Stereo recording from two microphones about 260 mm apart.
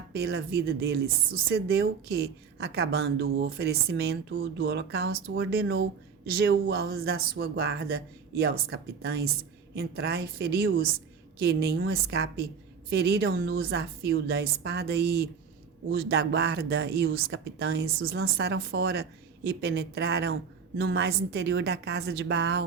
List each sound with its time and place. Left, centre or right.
0.1 s speech: right